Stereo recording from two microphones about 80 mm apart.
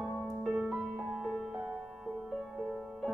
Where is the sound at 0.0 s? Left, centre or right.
Centre.